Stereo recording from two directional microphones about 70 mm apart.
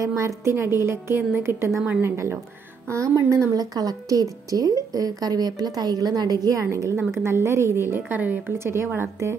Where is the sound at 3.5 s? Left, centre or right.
Right.